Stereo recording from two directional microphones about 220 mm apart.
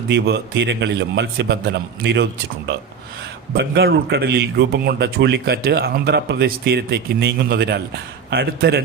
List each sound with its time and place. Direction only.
0.1 s speech: 50° right (ahead or behind)
3.5 s speech: 45° right (ahead or behind)